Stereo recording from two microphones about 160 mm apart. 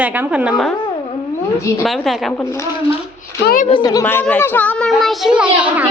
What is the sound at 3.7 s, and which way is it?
Speech, 25° left (ahead or behind).